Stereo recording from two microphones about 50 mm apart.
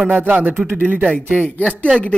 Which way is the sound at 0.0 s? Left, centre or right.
Right.